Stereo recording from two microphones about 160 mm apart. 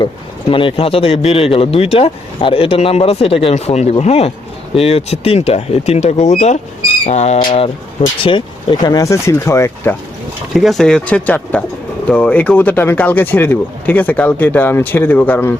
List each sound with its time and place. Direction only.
0.5 s speech: 35° left (ahead or behind)
8.2 s speech: 30° left (ahead or behind)
10.5 s speech: centre (ahead or behind)